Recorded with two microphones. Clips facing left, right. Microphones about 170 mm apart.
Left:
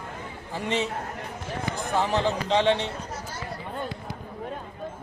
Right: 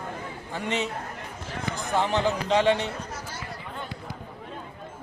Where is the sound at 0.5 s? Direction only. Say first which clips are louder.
Left 1 dB; 35° left (ahead or behind).